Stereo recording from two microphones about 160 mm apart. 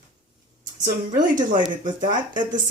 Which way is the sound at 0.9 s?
60° right (ahead or behind).